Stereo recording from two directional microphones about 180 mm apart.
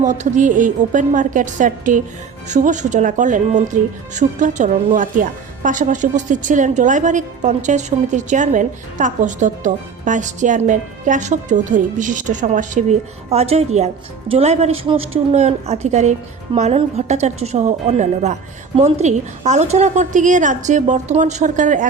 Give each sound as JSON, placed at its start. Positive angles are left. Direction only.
{"t": 0.0, "sound": "a woman's voice", "side_deg": -40}